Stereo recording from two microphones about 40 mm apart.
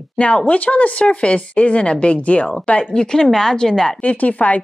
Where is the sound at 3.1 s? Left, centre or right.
Centre.